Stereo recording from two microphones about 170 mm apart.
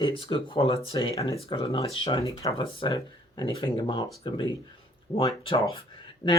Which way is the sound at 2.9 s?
20° left (ahead or behind).